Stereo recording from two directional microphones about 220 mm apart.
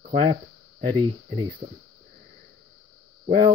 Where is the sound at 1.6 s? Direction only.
30° right (ahead or behind).